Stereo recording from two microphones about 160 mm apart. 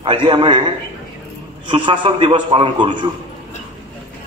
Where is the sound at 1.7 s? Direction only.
30° right (ahead or behind).